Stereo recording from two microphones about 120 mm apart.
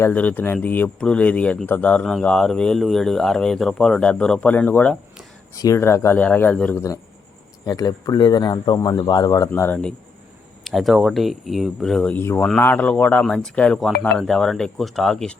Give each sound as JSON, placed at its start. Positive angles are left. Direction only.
{"t": 0.0, "sound": "speech", "side_deg": 15}
{"t": 5.5, "sound": "speech", "side_deg": 25}
{"t": 7.6, "sound": "speech", "side_deg": 30}
{"t": 9.5, "sound": "speech", "side_deg": 15}
{"t": 10.6, "sound": "speech", "side_deg": 0}
{"t": 12.1, "sound": "speech", "side_deg": 20}